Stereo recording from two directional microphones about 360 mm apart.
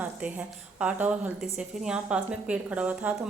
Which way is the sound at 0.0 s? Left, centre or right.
Centre.